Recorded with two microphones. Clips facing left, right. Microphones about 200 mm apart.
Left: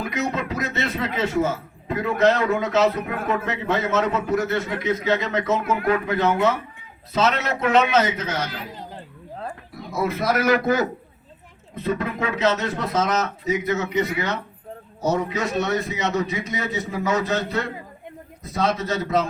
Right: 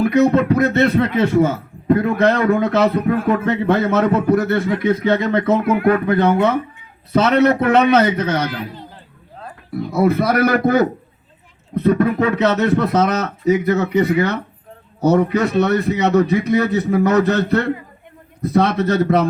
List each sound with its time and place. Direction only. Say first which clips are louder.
0.1 s a man's voice: right 12 dB; 60° right (ahead or behind)
9.9 s a man's voice: right 7 dB; 60° right (ahead or behind)